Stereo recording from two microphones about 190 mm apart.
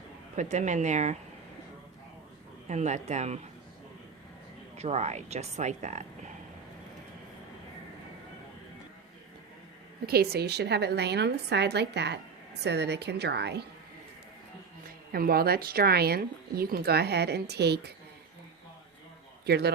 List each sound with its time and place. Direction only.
0.3 s speech: 40° right (ahead or behind)
2.6 s speech: 35° right (ahead or behind)
4.8 s speech: 35° right (ahead or behind)
10.1 s speech: 55° right (ahead or behind)
14.8 s speech: 50° right (ahead or behind)
19.5 s speech: 60° right (ahead or behind)